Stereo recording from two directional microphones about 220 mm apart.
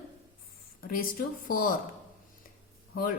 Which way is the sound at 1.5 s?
40° left (ahead or behind).